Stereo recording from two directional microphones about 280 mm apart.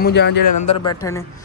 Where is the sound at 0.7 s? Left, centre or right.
Centre.